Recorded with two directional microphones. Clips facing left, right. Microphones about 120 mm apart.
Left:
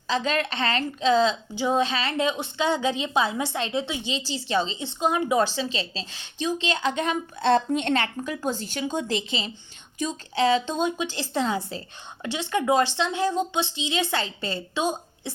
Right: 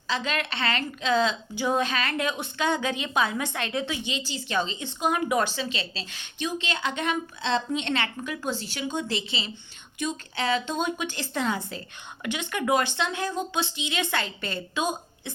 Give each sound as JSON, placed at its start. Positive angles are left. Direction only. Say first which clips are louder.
{"t": 0.1, "sound": "a woman's voice", "louder": "left 4 dB", "side_deg": 35}
{"t": 7.4, "sound": "a woman's voice", "louder": "left 6 dB", "side_deg": 50}